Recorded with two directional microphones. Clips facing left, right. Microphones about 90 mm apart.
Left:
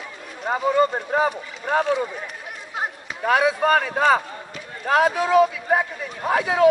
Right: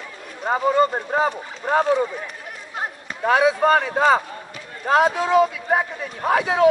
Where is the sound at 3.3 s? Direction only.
30° right (ahead or behind).